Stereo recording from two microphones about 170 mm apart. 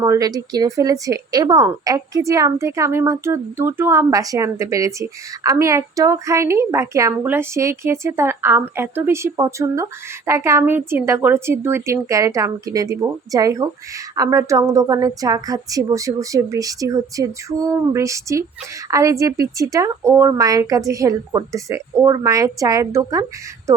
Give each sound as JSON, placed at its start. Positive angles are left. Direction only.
{"t": 0.0, "sound": "a woman's voice", "side_deg": -20}